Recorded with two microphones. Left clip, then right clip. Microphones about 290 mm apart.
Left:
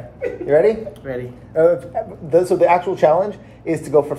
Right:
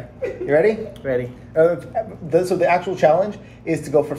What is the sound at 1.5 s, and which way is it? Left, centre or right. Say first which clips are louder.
Speech: left 2 dB; centre.